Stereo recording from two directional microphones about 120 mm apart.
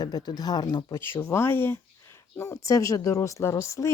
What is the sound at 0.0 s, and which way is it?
Speech, 30° left (ahead or behind).